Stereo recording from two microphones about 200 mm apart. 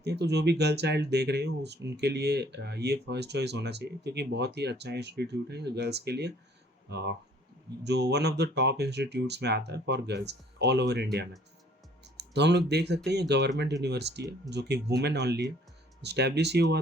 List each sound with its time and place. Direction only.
0.0 s speech: 55° right (ahead or behind)